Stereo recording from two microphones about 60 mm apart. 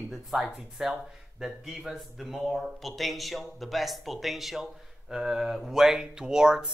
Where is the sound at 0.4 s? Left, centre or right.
Centre.